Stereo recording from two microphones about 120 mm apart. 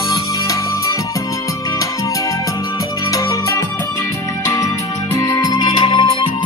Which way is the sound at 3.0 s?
30° left (ahead or behind).